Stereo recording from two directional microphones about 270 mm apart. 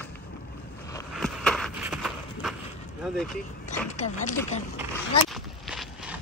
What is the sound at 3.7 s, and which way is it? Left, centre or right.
Speech, left.